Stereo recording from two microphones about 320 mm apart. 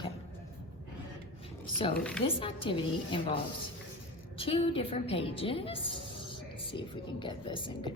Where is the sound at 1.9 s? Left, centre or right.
Centre.